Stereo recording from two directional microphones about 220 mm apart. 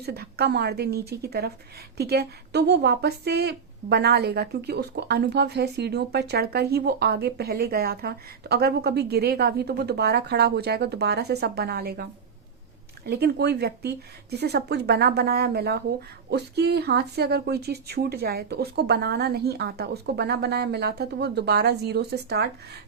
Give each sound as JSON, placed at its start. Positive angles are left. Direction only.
{"t": 0.0, "sound": "speech", "side_deg": -45}
{"t": 13.1, "sound": "speech", "side_deg": -45}